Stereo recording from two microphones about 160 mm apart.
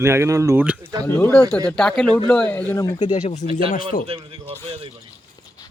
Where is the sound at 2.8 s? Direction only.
25° left (ahead or behind).